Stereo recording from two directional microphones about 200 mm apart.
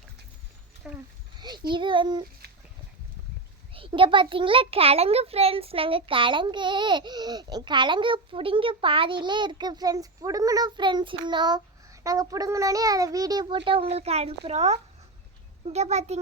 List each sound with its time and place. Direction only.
0.8 s speech: 5° right (ahead or behind)
1.4 s a child's voice: 20° right (ahead or behind)
3.8 s a child's voice: 25° right (ahead or behind)